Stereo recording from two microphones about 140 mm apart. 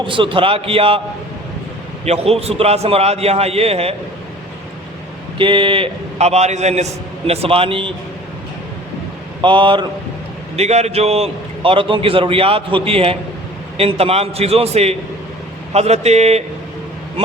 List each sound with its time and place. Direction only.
0.0 s a man's voice: 35° right (ahead or behind)
2.0 s a man's voice: 45° right (ahead or behind)
5.4 s a man's voice: 35° right (ahead or behind)
9.4 s a man's voice: 35° right (ahead or behind)
10.6 s a man's voice: 50° right (ahead or behind)